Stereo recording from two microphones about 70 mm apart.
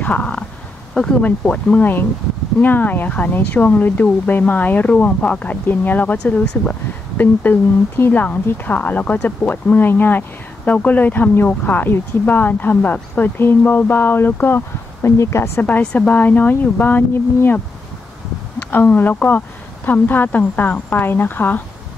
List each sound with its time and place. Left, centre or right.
0.0 s a sound: centre
1.2 s speech: centre
6.7 s speech: left
15.6 s speech: centre
18.7 s speech: left